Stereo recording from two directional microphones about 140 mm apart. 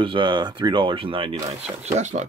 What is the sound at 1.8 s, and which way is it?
Speech, 55° right (ahead or behind).